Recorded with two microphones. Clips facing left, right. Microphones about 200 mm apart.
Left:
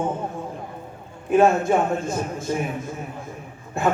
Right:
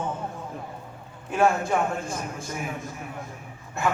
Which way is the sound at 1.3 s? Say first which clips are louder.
Left 6 dB; 25° left (ahead or behind).